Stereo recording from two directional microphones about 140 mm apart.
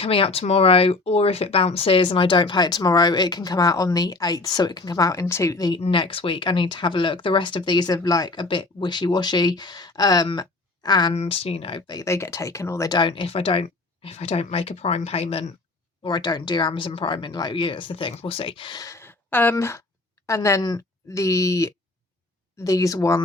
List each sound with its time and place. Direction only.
0.0 s speech: 40° left (ahead or behind)
5.8 s speech: 40° left (ahead or behind)
11.1 s speech: 45° left (ahead or behind)
16.0 s speech: 30° left (ahead or behind)